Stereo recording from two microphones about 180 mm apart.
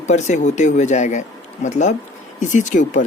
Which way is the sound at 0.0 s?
40° left (ahead or behind).